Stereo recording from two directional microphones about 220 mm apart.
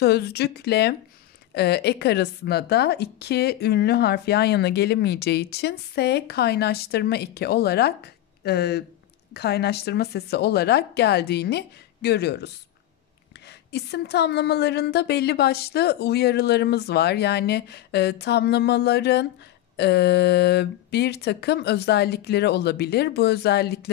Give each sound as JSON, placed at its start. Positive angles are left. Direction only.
{"t": 0.0, "sound": "a woman's voice", "side_deg": 50}
{"t": 13.5, "sound": "a woman's voice", "side_deg": 50}